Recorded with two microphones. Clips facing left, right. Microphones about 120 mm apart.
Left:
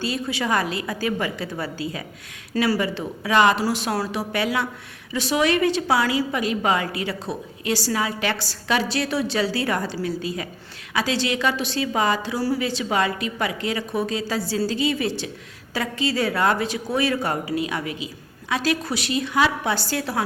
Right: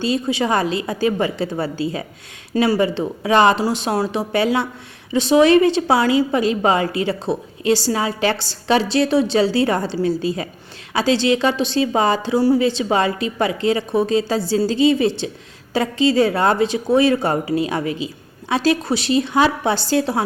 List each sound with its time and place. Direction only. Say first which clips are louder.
0.0 s a woman's voice: right 6 dB; 25° right (ahead or behind)